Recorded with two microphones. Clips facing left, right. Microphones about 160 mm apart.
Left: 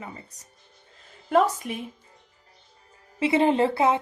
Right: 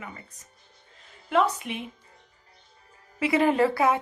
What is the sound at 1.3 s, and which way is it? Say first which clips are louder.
Speech: left 2 dB; 40° left (ahead or behind).